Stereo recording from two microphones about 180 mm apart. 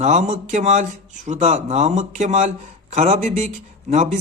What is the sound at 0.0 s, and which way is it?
A man's voice, 40° right (ahead or behind).